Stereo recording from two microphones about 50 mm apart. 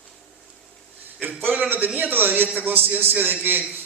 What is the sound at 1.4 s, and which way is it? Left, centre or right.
A man's voice, right.